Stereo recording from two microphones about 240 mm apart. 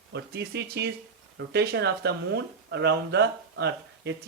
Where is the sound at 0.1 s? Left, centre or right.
Right.